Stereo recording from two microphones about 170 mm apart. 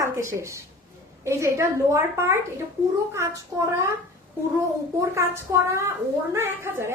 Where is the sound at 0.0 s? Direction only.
15° right (ahead or behind).